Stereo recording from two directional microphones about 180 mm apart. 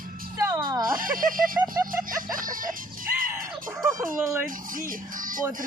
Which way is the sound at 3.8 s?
Centre (ahead or behind).